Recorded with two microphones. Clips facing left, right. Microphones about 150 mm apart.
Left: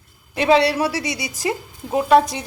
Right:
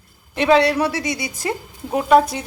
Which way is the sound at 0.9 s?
50° right (ahead or behind).